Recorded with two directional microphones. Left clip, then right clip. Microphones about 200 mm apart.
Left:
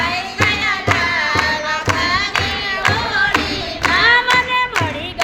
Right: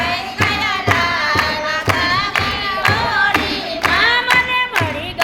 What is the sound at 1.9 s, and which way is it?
Music, 30° left (ahead or behind).